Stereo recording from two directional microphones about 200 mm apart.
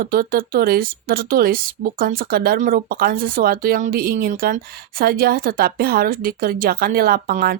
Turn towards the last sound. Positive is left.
turn(degrees=-45)  # may be behind; listen again after turning